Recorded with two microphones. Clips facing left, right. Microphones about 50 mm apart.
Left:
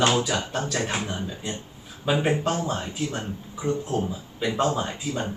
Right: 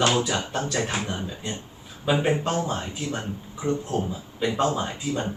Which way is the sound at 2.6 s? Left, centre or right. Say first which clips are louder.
Right 1 dB; centre.